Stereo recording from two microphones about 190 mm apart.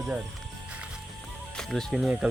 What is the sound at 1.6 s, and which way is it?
Speech, centre (ahead or behind).